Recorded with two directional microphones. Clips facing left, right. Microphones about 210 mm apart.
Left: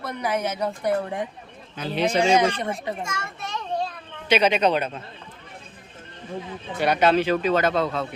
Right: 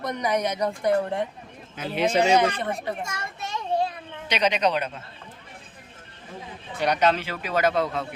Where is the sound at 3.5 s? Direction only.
10° right (ahead or behind).